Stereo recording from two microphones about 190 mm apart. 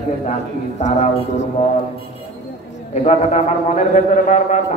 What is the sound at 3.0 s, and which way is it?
Speech, 40° left (ahead or behind).